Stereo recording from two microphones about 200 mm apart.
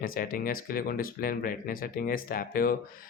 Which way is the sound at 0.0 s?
45° left (ahead or behind).